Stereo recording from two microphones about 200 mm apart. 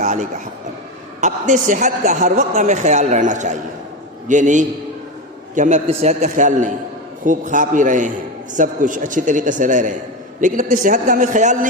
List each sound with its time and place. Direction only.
0.0 s vehicle: 40° right (ahead or behind)
1.2 s a woman's voice: 40° right (ahead or behind)